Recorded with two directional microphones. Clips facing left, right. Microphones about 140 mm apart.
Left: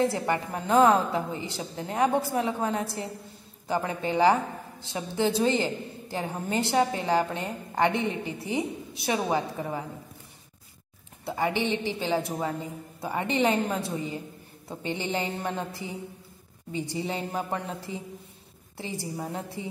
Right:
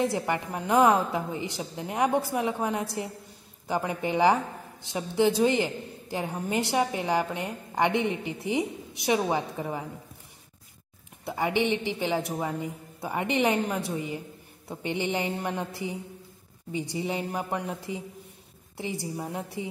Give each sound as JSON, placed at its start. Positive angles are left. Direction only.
{"t": 0.0, "sound": "a woman's voice", "side_deg": -15}
{"t": 11.2, "sound": "a woman's voice", "side_deg": -15}